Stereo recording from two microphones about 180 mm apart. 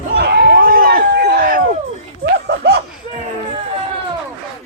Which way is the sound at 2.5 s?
70° right (ahead or behind).